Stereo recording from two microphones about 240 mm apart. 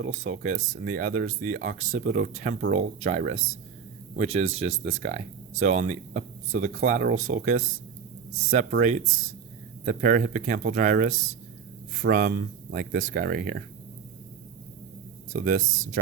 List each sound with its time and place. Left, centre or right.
0.0 s speech: right
15.3 s speech: right